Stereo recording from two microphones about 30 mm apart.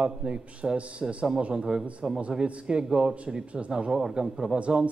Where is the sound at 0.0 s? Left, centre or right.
Right.